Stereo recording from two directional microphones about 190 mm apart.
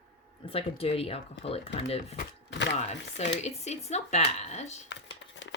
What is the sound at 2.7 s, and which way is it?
A woman's voice, 35° left (ahead or behind).